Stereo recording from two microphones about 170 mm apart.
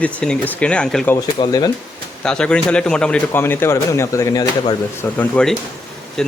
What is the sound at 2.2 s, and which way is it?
Speech, 5° left (ahead or behind).